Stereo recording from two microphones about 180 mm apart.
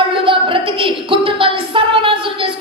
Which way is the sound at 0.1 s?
30° right (ahead or behind).